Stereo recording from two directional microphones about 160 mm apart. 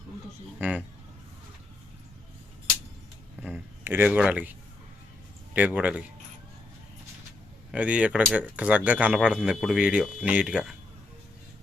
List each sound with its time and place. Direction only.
0.6 s speech: 10° right (ahead or behind)
3.4 s a sound: 10° right (ahead or behind)
5.5 s speech: 10° right (ahead or behind)
7.7 s speech: 10° right (ahead or behind)